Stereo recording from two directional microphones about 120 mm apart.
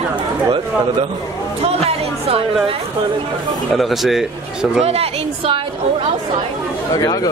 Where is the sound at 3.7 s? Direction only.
Centre (ahead or behind).